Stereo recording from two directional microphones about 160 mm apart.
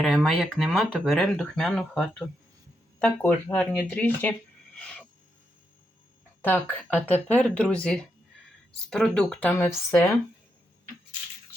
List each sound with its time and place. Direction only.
0.0 s speech: centre (ahead or behind)
6.4 s speech: 10° left (ahead or behind)